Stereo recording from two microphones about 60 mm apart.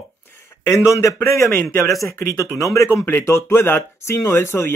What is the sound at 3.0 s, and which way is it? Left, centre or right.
Speech, left.